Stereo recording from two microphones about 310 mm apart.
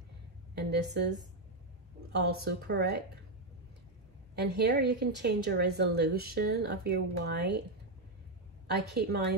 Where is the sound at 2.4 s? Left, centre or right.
Right.